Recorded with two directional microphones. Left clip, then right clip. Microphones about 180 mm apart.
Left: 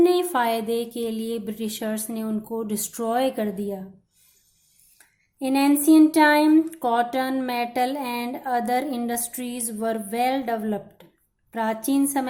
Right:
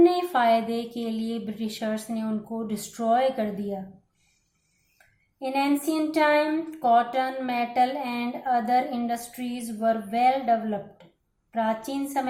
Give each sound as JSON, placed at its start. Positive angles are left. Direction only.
{"t": 0.0, "sound": "speech", "side_deg": 40}
{"t": 5.4, "sound": "a woman's voice", "side_deg": 40}